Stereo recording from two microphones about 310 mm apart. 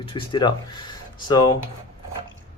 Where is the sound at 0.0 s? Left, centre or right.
Centre.